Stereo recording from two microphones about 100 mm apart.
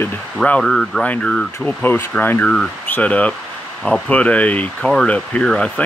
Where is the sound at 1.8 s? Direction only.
20° left (ahead or behind).